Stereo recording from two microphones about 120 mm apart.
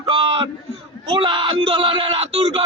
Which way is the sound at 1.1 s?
45° right (ahead or behind).